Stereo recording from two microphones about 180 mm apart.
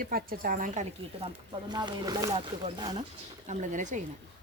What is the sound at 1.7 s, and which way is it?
Speech, 25° right (ahead or behind).